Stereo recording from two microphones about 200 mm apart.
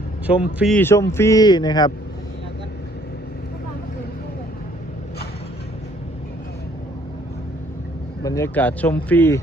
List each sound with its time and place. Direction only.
0.3 s a man's voice: 5° right (ahead or behind)
0.8 s speech: 15° left (ahead or behind)
8.2 s speech: 15° left (ahead or behind)